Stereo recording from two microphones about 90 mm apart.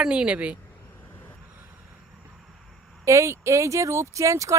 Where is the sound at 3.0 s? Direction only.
35° right (ahead or behind).